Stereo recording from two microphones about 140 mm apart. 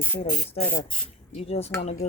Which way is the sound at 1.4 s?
45° left (ahead or behind).